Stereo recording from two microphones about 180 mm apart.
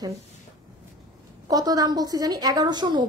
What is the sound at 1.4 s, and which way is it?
A woman's voice, 20° right (ahead or behind).